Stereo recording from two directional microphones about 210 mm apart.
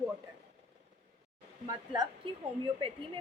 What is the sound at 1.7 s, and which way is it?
Speech, 20° right (ahead or behind).